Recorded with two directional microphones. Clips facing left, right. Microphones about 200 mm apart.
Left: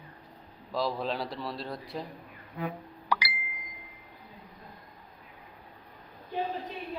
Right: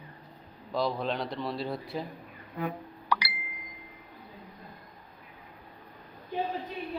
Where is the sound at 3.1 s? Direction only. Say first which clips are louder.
Even; 10° left (ahead or behind).